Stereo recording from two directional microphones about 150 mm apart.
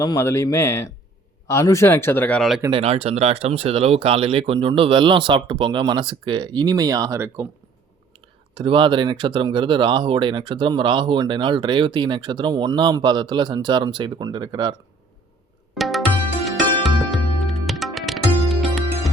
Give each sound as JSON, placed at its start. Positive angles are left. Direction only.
{"t": 0.0, "sound": "speech", "side_deg": 20}
{"t": 2.6, "sound": "speech", "side_deg": -40}
{"t": 8.5, "sound": "speech", "side_deg": -35}
{"t": 15.7, "sound": "music", "side_deg": 0}